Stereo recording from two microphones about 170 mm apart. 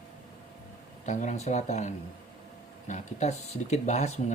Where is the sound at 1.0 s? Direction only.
45° left (ahead or behind).